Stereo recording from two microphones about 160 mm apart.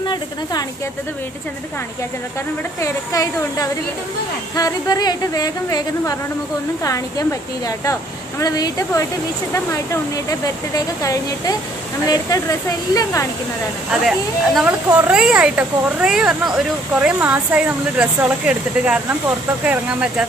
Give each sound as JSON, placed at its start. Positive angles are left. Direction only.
{"t": 0.0, "sound": "a woman's voice", "side_deg": 25}
{"t": 2.8, "sound": "a woman's voice", "side_deg": 20}
{"t": 11.0, "sound": "a woman's voice", "side_deg": 20}
{"t": 14.0, "sound": "speech", "side_deg": 0}